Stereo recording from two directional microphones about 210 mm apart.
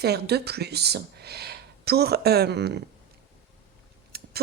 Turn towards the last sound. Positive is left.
turn(degrees=-50)  # may be behind; listen again after turning